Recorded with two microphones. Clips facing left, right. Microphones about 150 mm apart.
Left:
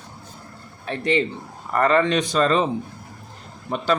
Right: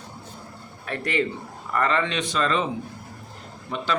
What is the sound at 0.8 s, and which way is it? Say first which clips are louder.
Speech: left 4 dB; 25° left (ahead or behind).